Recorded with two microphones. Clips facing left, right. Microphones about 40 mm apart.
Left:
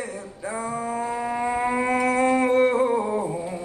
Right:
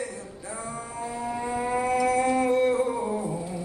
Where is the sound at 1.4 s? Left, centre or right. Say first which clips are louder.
Left 3 dB; left.